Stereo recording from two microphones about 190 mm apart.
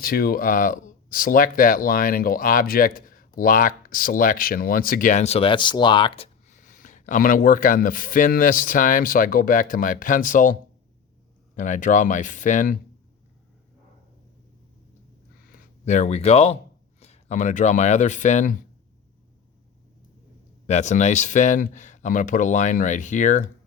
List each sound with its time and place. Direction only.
0.0 s speech: 50° left (ahead or behind)
15.8 s speech: 40° left (ahead or behind)
20.7 s speech: 35° left (ahead or behind)